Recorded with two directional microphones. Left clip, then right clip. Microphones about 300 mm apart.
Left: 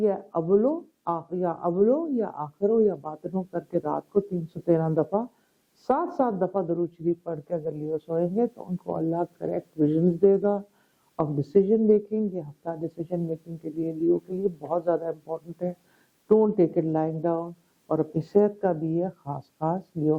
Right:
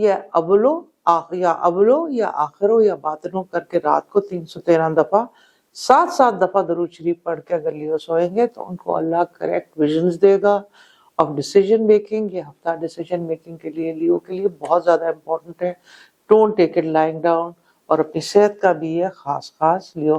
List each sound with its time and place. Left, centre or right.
0.0 s speech: centre
13.3 s speech: right
13.8 s speech: centre